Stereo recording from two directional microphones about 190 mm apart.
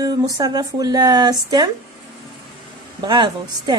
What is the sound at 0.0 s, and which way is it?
A woman's voice, 20° right (ahead or behind).